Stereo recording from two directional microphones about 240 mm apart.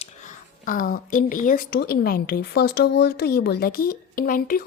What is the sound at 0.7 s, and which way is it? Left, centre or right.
A woman's voice, left.